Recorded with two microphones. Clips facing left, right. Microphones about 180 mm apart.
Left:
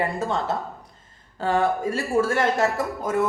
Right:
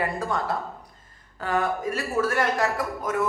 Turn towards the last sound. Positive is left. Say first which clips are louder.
# left 3 dB
turn(degrees=30)  # may be behind; listen again after turning